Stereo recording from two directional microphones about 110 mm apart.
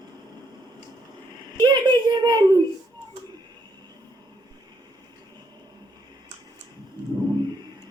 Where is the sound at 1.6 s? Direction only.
40° right (ahead or behind).